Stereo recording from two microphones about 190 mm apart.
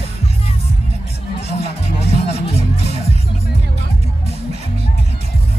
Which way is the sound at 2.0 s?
35° left (ahead or behind).